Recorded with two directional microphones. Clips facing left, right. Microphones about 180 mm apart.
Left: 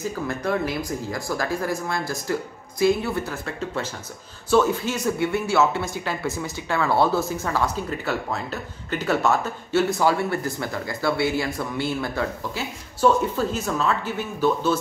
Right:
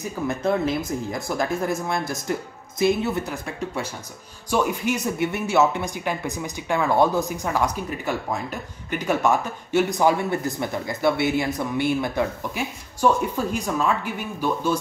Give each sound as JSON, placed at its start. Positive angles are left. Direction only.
{"t": 0.0, "sound": "speech", "side_deg": -20}